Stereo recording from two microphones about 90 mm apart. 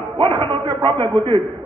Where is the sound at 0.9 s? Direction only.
25° left (ahead or behind).